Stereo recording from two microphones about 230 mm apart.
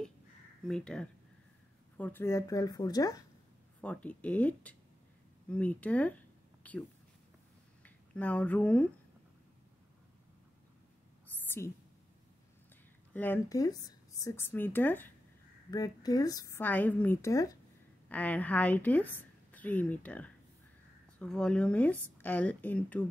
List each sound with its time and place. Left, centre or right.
0.7 s speech: centre
7.8 s speech: centre
11.3 s whispering: centre
13.1 s a woman's voice: centre